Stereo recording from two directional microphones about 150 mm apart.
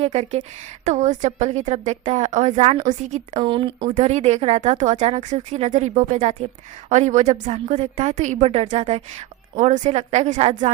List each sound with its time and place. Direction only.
0.0 s speech: 45° right (ahead or behind)
3.3 s speech: 35° right (ahead or behind)
3.9 s speech: 50° right (ahead or behind)
6.1 s speech: 45° right (ahead or behind)